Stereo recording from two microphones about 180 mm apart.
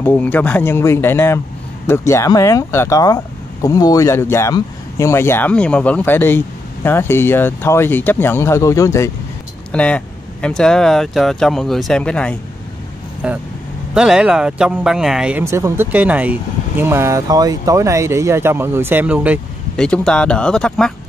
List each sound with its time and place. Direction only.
0.0 s speech: 10° left (ahead or behind)
9.7 s speech: 5° left (ahead or behind)
13.2 s speech: 5° right (ahead or behind)
15.4 s speech: 15° right (ahead or behind)
19.8 s speech: 5° left (ahead or behind)